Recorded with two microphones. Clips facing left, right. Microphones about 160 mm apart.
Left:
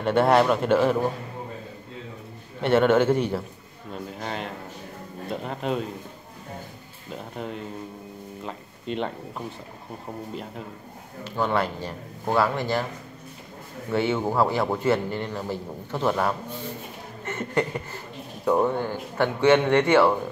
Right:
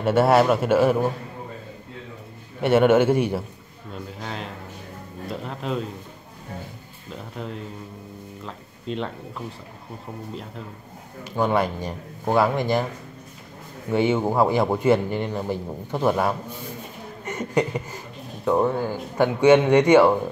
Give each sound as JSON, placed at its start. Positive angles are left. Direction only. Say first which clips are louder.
{"t": 0.0, "sound": "a man's voice", "louder": "right 2 dB", "side_deg": -5}
{"t": 2.6, "sound": "a man's voice", "louder": "right 2 dB", "side_deg": -10}
{"t": 3.9, "sound": "a man's voice", "louder": "left 1 dB", "side_deg": 0}
{"t": 7.3, "sound": "a man's voice", "louder": "even", "side_deg": 5}
{"t": 11.2, "sound": "a man's voice", "louder": "right 3 dB", "side_deg": -15}
{"t": 13.8, "sound": "a man's voice", "louder": "right 3 dB", "side_deg": -15}